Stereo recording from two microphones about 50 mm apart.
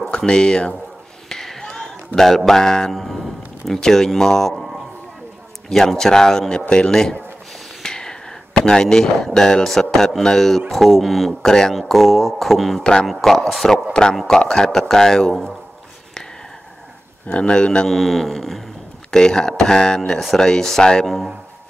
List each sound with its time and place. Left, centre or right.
0.2 s speech: centre
1.3 s a sound: centre
2.1 s speech: centre
11.4 s speech: centre
11.7 s speech: centre
17.3 s a man's voice: left
17.8 s speech: centre